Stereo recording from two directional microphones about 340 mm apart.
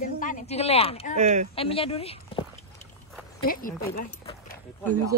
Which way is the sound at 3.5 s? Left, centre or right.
Left.